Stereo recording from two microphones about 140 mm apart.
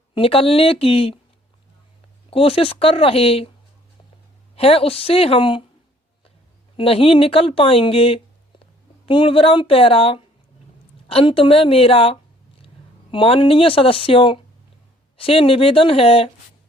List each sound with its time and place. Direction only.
0.1 s speech: 45° left (ahead or behind)
2.3 s speech: 40° left (ahead or behind)
4.5 s speech: 45° left (ahead or behind)
6.7 s speech: 40° left (ahead or behind)